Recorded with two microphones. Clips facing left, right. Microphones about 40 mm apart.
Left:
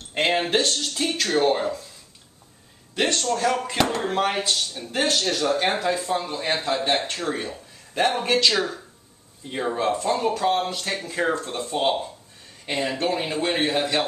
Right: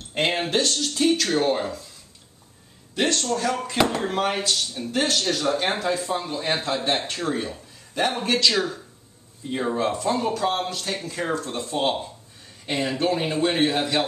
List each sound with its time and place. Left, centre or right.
0.1 s speech: centre
3.0 s speech: centre
3.7 s speech: centre
8.2 s speech: centre
9.5 s speech: centre
10.7 s speech: centre